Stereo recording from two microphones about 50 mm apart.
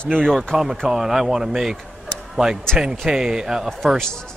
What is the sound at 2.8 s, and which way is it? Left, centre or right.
Speech, centre.